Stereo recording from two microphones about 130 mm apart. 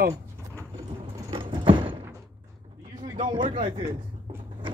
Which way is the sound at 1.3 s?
40° right (ahead or behind).